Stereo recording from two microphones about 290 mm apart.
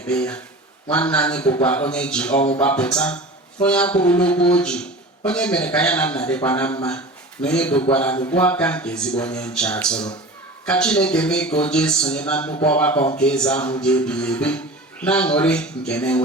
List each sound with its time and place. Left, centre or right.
0.1 s speech: centre